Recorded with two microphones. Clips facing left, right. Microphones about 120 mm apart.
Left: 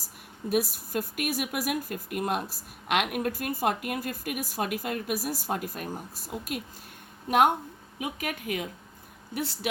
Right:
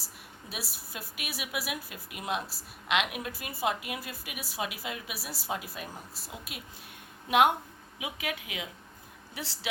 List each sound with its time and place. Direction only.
0.5 s speech: 50° left (ahead or behind)